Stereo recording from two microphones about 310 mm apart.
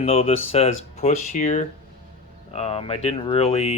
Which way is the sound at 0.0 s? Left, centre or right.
Centre.